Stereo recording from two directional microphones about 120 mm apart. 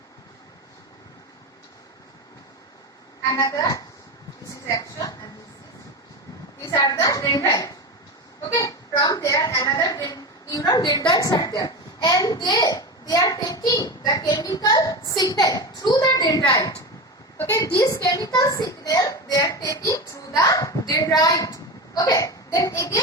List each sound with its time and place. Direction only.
3.3 s a woman's voice: 30° left (ahead or behind)
4.5 s a sound: 25° left (ahead or behind)
6.6 s a woman's voice: 35° left (ahead or behind)
17.7 s a woman's voice: 25° left (ahead or behind)